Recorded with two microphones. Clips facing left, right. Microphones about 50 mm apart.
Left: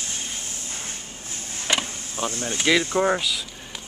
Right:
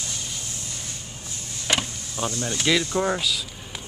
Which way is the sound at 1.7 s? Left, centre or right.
Centre.